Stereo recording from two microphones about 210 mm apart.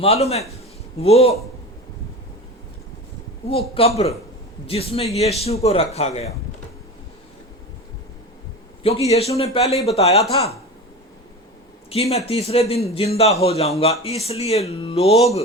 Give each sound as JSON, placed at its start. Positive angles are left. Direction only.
{"t": 0.0, "sound": "a man's voice", "side_deg": 30}
{"t": 3.4, "sound": "a man's voice", "side_deg": 30}
{"t": 8.8, "sound": "a man's voice", "side_deg": 30}
{"t": 11.9, "sound": "a man's voice", "side_deg": 30}